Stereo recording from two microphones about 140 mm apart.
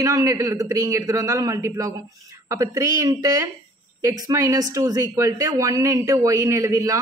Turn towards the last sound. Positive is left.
turn(degrees=-20)  # may be behind; listen again after turning